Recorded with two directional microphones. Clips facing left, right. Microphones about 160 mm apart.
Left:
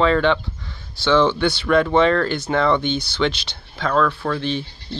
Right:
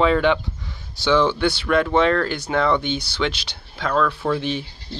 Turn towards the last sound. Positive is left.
turn(degrees=-10)  # may be behind; listen again after turning